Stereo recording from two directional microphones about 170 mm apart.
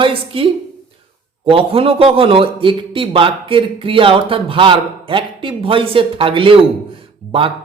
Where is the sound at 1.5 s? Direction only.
35° right (ahead or behind).